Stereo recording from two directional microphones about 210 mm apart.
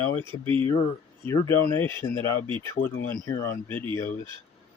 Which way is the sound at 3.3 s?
15° left (ahead or behind).